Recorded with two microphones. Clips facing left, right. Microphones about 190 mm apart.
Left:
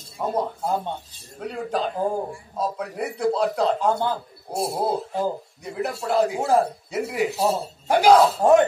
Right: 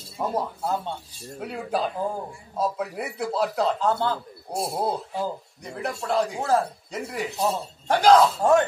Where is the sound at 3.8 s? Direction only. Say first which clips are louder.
Left 1 dB; 15° left (ahead or behind).